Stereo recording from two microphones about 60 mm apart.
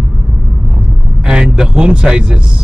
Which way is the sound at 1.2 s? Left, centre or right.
Centre.